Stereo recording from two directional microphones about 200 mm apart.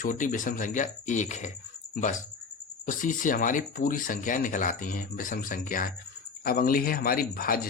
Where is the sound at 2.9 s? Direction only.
40° left (ahead or behind).